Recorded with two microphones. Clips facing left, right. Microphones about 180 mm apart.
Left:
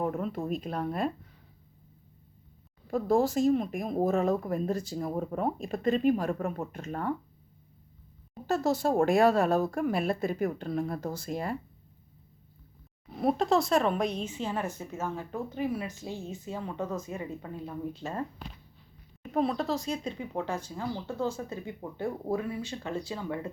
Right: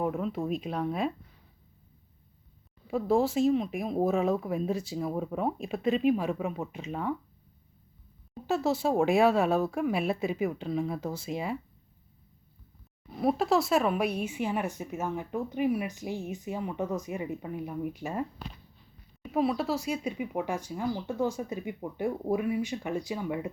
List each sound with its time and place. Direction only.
0.0 s speech: centre (ahead or behind)
2.8 s speech: 5° right (ahead or behind)
8.4 s speech: 5° right (ahead or behind)
13.1 s speech: centre (ahead or behind)
19.3 s speech: 5° right (ahead or behind)